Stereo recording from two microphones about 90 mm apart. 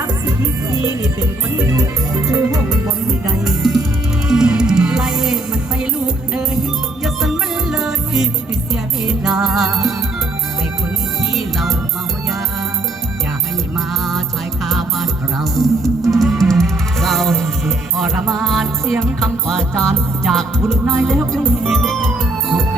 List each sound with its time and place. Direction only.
1.8 s music: 40° right (ahead or behind)
3.4 s music: 5° right (ahead or behind)
13.7 s music: centre (ahead or behind)